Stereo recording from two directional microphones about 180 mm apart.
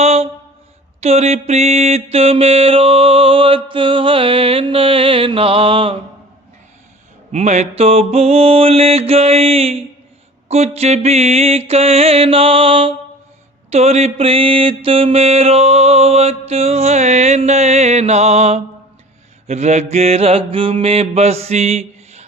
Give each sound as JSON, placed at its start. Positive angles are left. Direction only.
{"t": 0.0, "sound": "a sound", "side_deg": -35}
{"t": 1.0, "sound": "mantra", "side_deg": -35}
{"t": 7.3, "sound": "mantra", "side_deg": -40}